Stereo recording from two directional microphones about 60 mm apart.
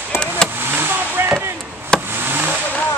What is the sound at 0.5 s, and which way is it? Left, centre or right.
Vehicle, right.